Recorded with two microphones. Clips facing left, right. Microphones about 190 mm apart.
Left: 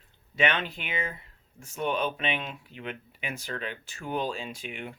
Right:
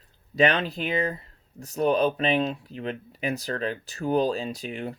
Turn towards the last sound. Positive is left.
turn(degrees=-35)  # may be behind; listen again after turning